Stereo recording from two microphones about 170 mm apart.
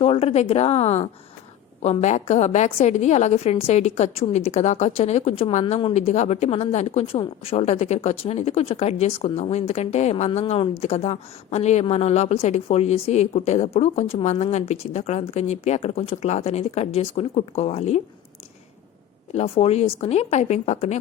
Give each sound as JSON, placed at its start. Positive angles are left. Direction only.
{"t": 0.0, "sound": "a woman's voice", "side_deg": 35}
{"t": 19.3, "sound": "a woman's voice", "side_deg": 35}